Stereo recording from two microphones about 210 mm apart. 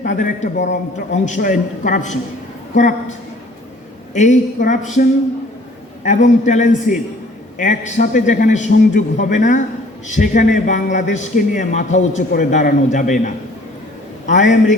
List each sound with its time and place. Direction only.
0.0 s a man's voice: 40° left (ahead or behind)